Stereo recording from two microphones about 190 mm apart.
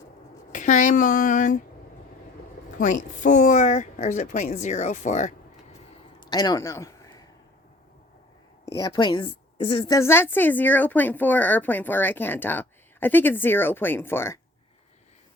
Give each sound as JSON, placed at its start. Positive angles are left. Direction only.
{"t": 0.5, "sound": "speech", "side_deg": 40}
{"t": 2.7, "sound": "speech", "side_deg": 40}
{"t": 6.3, "sound": "speech", "side_deg": 20}
{"t": 8.6, "sound": "a woman's voice", "side_deg": 20}